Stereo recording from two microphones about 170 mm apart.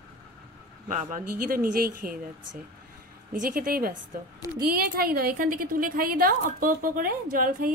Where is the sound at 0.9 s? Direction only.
50° right (ahead or behind).